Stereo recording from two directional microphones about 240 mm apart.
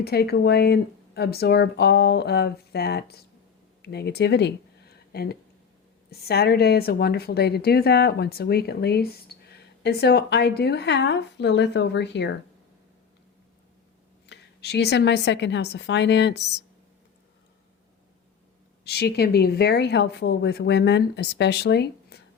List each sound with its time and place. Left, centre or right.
0.0 s a woman's voice: left
14.3 s speech: left
18.9 s speech: left